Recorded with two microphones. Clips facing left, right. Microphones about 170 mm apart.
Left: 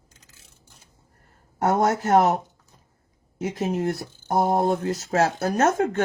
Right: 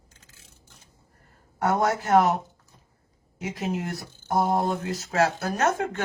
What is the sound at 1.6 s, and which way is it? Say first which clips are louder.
Speech: left 3 dB; 40° left (ahead or behind).